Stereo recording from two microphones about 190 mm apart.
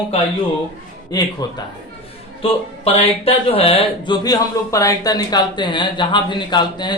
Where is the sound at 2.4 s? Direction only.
30° left (ahead or behind).